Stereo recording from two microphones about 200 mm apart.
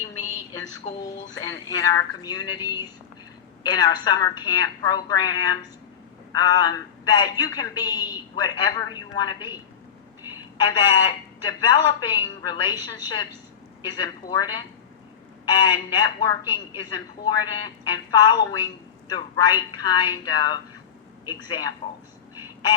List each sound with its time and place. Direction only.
0.9 s a woman's voice: 20° left (ahead or behind)